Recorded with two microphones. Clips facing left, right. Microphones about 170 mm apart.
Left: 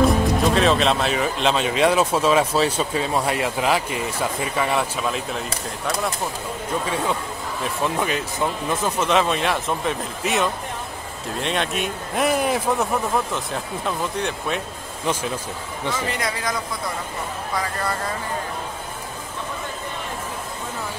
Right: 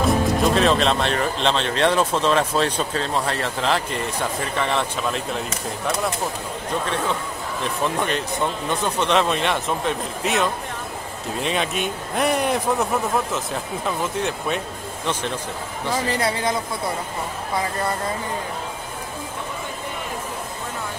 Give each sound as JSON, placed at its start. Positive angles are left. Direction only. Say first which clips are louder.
{"t": 0.0, "sound": "speech", "louder": "left 1 dB", "side_deg": 0}
{"t": 7.6, "sound": "speech", "louder": "even", "side_deg": 5}
{"t": 15.9, "sound": "speech", "louder": "right 4 dB", "side_deg": -35}
{"t": 17.6, "sound": "speech", "louder": "right 2 dB", "side_deg": -25}